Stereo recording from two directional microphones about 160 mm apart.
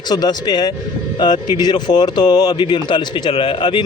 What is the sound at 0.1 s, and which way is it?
A man's voice, 25° left (ahead or behind).